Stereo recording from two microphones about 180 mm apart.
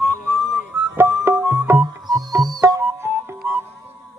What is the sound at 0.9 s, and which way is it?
Music, 15° right (ahead or behind).